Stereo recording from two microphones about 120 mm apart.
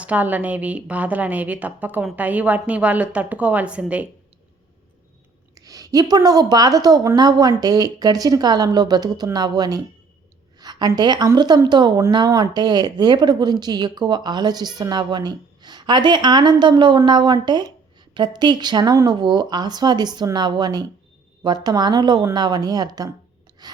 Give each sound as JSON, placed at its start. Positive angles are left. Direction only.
{"t": 0.0, "sound": "a woman's voice", "side_deg": -15}
{"t": 5.5, "sound": "a woman's voice", "side_deg": -30}
{"t": 23.6, "sound": "a sound", "side_deg": -35}